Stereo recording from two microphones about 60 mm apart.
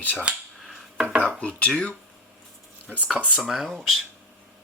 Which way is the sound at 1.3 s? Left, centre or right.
Left.